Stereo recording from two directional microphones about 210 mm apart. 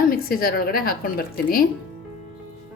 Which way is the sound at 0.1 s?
45° left (ahead or behind).